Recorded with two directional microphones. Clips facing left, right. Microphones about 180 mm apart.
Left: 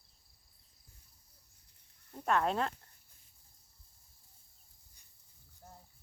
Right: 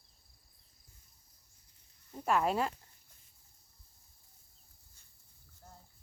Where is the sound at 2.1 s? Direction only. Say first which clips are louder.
Right 1 dB; 5° right (ahead or behind).